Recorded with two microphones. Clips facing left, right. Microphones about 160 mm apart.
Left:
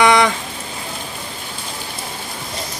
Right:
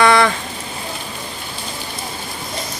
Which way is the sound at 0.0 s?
20° left (ahead or behind).